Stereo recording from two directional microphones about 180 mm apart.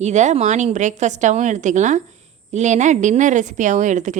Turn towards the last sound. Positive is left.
turn(degrees=-45)  # may be behind; listen again after turning